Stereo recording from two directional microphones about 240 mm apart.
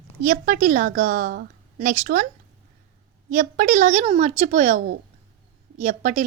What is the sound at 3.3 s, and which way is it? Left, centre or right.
A woman's voice, right.